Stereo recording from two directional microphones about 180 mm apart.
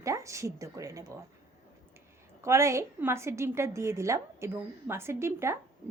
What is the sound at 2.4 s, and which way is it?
A woman's voice, 15° right (ahead or behind).